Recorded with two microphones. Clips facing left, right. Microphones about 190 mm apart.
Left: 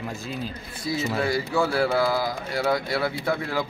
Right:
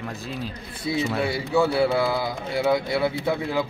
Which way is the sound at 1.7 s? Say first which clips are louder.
Right 1 dB; 25° right (ahead or behind).